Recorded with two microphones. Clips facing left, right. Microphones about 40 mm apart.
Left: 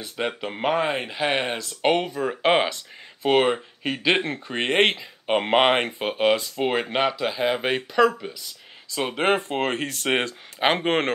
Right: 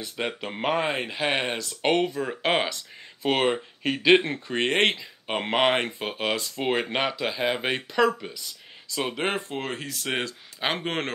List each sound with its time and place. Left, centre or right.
0.4 s speech: centre
9.5 s speech: left
10.1 s speech: left